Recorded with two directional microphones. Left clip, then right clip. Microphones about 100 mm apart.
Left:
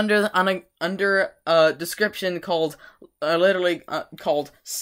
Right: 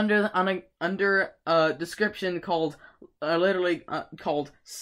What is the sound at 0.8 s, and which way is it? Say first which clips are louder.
Speech: left 3 dB; centre (ahead or behind).